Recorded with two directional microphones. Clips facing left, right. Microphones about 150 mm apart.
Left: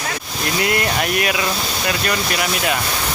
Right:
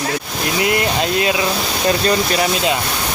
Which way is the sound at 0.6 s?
20° right (ahead or behind).